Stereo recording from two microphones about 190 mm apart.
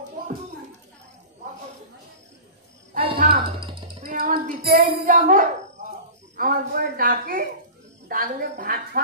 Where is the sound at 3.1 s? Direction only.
50° right (ahead or behind).